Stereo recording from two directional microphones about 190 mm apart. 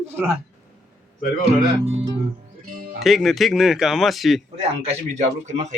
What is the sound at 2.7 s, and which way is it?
Music, 50° right (ahead or behind).